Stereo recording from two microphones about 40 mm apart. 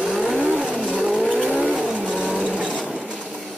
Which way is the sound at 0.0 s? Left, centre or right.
Centre.